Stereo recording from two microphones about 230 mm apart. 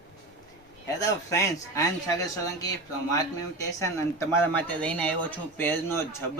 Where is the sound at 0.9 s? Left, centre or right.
Centre.